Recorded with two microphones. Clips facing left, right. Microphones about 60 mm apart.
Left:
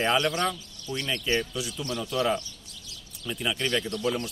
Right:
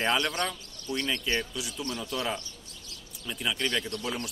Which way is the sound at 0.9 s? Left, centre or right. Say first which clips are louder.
Left 2 dB; centre.